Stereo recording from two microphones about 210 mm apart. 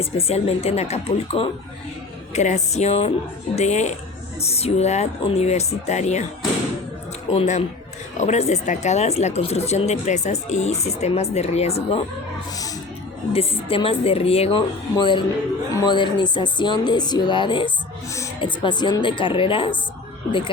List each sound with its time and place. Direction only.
0.0 s speech: 30° left (ahead or behind)
7.3 s speech: 30° left (ahead or behind)
13.3 s speech: 25° left (ahead or behind)